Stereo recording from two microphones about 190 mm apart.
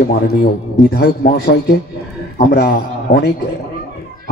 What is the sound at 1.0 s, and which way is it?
A man's voice, 60° left (ahead or behind).